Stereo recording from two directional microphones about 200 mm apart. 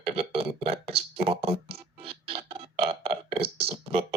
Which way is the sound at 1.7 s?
30° right (ahead or behind).